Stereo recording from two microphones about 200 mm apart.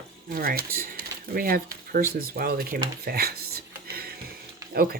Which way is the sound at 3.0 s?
50° right (ahead or behind).